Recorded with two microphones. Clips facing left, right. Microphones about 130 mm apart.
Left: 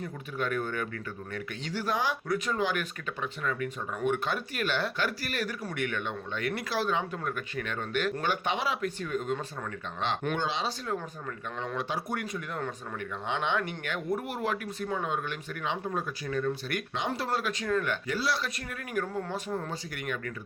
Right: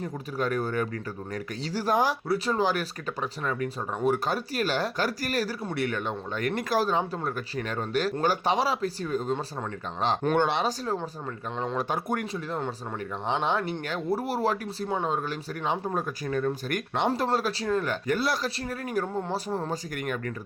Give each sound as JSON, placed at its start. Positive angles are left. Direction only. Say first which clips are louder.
{"t": 0.3, "sound": "speech", "louder": "right 4 dB", "side_deg": -40}
{"t": 10.3, "sound": "speech", "louder": "right 7 dB", "side_deg": -60}
{"t": 10.7, "sound": "speech", "louder": "right 4 dB", "side_deg": -35}
{"t": 11.8, "sound": "speech", "louder": "right 4 dB", "side_deg": -45}
{"t": 12.2, "sound": "speech", "louder": "right 4 dB", "side_deg": -30}
{"t": 18.1, "sound": "speech", "louder": "right 5 dB", "side_deg": -50}
{"t": 18.4, "sound": "speech", "louder": "right 6 dB", "side_deg": -35}